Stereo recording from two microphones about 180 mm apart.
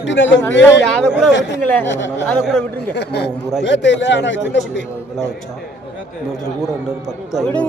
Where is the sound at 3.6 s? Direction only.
80° left.